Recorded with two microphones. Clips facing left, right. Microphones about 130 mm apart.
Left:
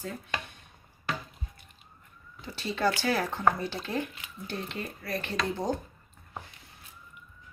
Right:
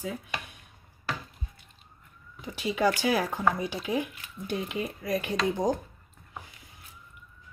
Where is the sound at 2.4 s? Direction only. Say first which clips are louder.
Right 3 dB; 15° right (ahead or behind).